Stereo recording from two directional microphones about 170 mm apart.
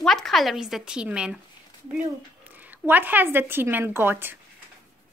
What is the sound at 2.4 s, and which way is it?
Speech, 10° right (ahead or behind).